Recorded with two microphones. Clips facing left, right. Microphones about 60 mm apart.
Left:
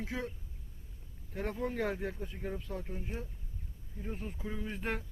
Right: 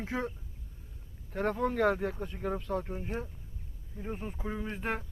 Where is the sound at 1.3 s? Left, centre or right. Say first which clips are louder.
Right 6 dB; right.